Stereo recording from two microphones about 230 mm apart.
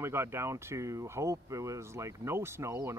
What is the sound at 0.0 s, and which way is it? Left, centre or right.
Speech, centre.